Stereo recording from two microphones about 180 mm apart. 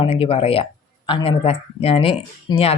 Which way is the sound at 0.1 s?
30° left (ahead or behind).